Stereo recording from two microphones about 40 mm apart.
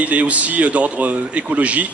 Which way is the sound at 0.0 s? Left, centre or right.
Right.